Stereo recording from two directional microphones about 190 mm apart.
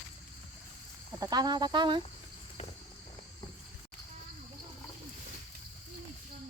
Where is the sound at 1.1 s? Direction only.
20° right (ahead or behind).